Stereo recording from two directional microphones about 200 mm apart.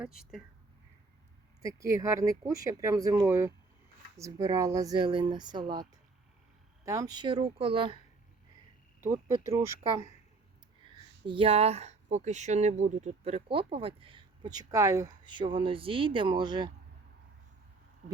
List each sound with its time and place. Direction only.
0.0 s speech: 5° right (ahead or behind)
1.6 s speech: 15° right (ahead or behind)
6.8 s speech: 15° right (ahead or behind)
9.4 s speech: 15° right (ahead or behind)
10.8 s speech: 25° right (ahead or behind)